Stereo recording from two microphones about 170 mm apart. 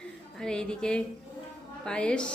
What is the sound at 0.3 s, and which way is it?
A woman's voice, 5° left (ahead or behind).